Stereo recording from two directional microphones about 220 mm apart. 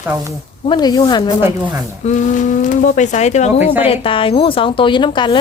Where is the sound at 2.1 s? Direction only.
35° left (ahead or behind).